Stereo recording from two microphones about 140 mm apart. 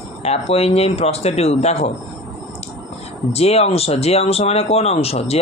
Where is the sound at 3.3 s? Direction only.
50° left (ahead or behind).